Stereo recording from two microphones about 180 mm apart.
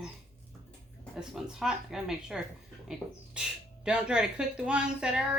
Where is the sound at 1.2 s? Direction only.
5° right (ahead or behind).